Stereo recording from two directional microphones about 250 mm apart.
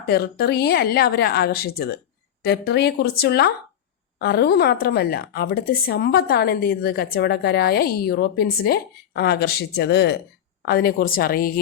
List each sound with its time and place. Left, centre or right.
0.1 s a woman's voice: left